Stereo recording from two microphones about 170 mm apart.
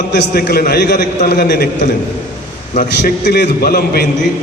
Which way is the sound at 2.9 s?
70° left (ahead or behind).